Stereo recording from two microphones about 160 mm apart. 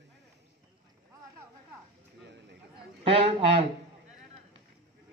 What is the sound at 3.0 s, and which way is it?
Speech, 35° right (ahead or behind).